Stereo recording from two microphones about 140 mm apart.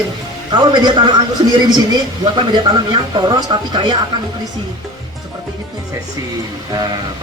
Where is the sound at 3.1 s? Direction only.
35° right (ahead or behind).